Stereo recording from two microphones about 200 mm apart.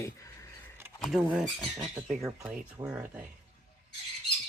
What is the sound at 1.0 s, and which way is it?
Speech, centre (ahead or behind).